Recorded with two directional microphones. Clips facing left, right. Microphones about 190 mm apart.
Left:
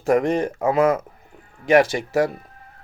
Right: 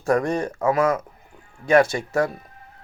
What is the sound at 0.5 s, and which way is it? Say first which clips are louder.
Speech: left 1 dB; 30° left (ahead or behind).